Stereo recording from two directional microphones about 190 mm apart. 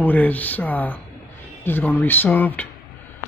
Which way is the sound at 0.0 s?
10° left (ahead or behind).